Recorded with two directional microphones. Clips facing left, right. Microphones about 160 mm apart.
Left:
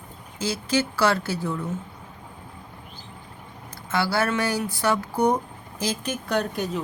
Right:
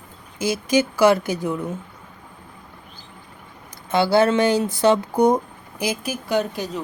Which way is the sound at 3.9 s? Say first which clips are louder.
Right 7 dB; 20° right (ahead or behind).